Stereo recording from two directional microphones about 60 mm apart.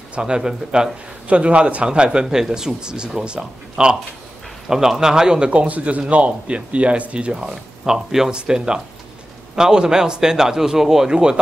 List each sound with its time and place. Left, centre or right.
0.1 s a man's voice: centre